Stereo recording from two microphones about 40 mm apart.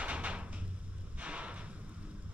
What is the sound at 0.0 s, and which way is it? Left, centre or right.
Cupboard open or close, right.